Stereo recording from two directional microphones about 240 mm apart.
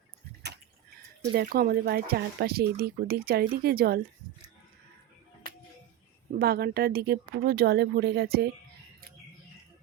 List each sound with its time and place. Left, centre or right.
1.3 s speech: right
6.4 s speech: right